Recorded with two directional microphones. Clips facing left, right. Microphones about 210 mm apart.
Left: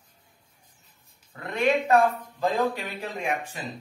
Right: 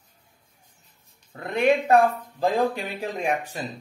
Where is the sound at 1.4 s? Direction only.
30° right (ahead or behind).